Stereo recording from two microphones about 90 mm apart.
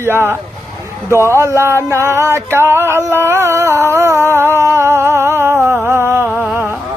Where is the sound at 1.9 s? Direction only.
30° right (ahead or behind).